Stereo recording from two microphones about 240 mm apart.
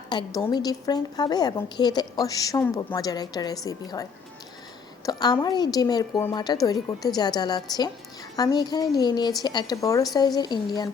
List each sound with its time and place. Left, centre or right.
0.3 s a woman's voice: centre
5.0 s a woman's voice: centre